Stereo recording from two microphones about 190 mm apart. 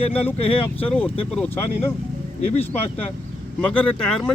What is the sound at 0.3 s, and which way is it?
Speech, 30° left (ahead or behind).